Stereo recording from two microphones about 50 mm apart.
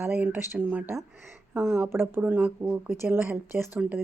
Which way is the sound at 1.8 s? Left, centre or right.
Right.